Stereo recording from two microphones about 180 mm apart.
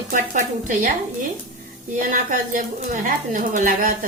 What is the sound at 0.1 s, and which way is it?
Speech, 45° right (ahead or behind).